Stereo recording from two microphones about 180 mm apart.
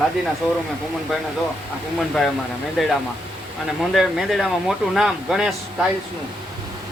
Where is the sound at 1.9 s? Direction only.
Centre (ahead or behind).